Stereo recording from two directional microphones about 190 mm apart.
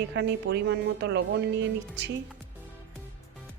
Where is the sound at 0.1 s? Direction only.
65° right (ahead or behind).